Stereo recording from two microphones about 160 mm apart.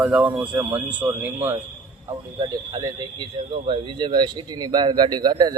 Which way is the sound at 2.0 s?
25° right (ahead or behind).